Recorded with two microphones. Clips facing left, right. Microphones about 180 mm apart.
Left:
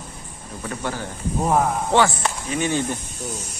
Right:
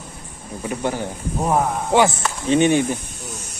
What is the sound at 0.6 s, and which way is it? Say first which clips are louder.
Speech: right 5 dB; 15° right (ahead or behind).